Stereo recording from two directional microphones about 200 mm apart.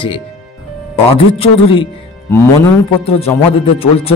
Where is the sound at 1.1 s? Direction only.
25° left (ahead or behind).